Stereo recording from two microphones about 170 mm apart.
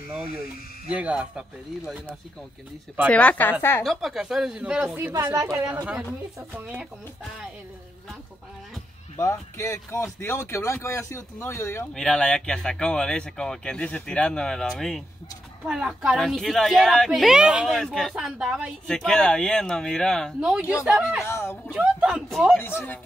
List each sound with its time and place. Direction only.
0.9 s speech: 5° right (ahead or behind)
3.1 s speech: 5° left (ahead or behind)
4.8 s speech: 15° right (ahead or behind)
6.5 s speech: 5° right (ahead or behind)
9.2 s speech: 15° left (ahead or behind); by 20.6 s 5° right (ahead or behind)
21.3 s speech: 15° left (ahead or behind)
21.7 s speech: 5° right (ahead or behind)
22.6 s speech: 15° left (ahead or behind)